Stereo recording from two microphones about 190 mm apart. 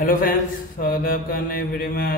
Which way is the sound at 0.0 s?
45° left (ahead or behind).